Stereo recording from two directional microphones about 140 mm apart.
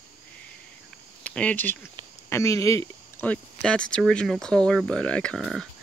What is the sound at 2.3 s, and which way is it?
Speech, 20° left (ahead or behind).